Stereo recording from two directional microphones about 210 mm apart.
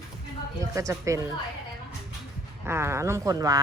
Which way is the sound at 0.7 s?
15° right (ahead or behind).